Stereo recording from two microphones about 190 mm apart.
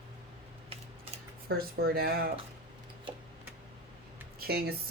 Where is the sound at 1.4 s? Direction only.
55° right (ahead or behind).